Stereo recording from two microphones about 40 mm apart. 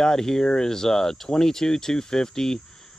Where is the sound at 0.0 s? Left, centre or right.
Centre.